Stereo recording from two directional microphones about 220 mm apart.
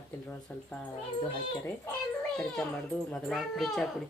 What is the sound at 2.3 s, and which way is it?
Speech, centre (ahead or behind).